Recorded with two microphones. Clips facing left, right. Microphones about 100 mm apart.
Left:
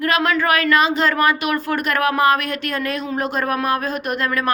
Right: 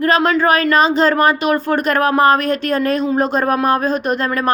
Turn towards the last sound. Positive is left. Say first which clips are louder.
# right 4 dB
turn(degrees=-35)  # may be behind; listen again after turning